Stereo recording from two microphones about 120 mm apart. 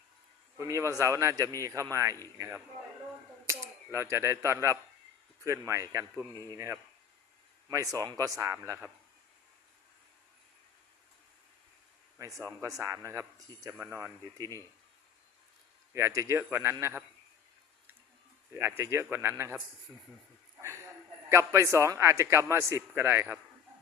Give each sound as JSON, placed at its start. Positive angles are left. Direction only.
{"t": 0.5, "sound": "a man's voice", "side_deg": -25}
{"t": 3.4, "sound": "a man's voice", "side_deg": -25}
{"t": 12.2, "sound": "a man's voice", "side_deg": -25}
{"t": 14.3, "sound": "speech", "side_deg": -30}
{"t": 15.9, "sound": "a man's voice", "side_deg": -25}
{"t": 18.8, "sound": "a man's voice", "side_deg": -20}
{"t": 21.2, "sound": "a man's voice", "side_deg": -25}